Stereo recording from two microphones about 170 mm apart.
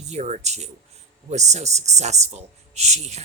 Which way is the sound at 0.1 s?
45° right (ahead or behind).